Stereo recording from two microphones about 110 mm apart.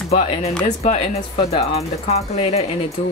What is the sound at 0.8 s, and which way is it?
Speech, 90° left.